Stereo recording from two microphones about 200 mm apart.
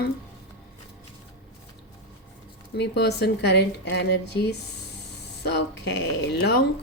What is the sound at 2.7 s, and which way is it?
Speech, 60° left (ahead or behind).